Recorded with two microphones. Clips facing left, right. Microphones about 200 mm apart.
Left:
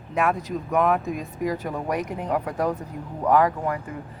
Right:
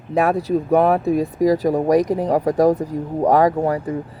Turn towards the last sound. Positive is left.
turn(degrees=-35)  # may be behind; listen again after turning